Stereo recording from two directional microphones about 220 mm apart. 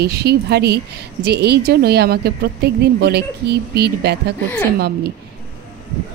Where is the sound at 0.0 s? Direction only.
45° right (ahead or behind).